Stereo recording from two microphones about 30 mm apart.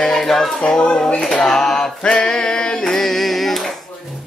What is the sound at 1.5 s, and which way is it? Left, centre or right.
Mantra, centre.